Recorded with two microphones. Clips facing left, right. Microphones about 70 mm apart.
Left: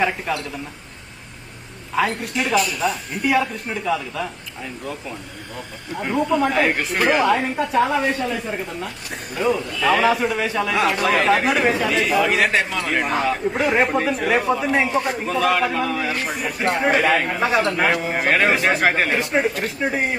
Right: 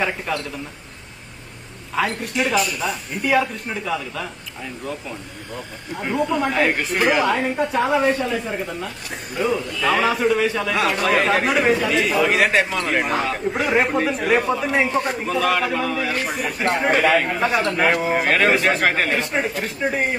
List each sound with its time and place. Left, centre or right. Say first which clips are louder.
0.3 s a man's voice: left 1 dB; centre
2.0 s a man's voice: even; centre
6.0 s a man's voice: left 2 dB; centre
9.4 s a man's voice: left 1 dB; centre